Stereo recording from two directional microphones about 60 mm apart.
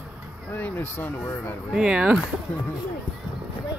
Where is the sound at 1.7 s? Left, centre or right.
Centre.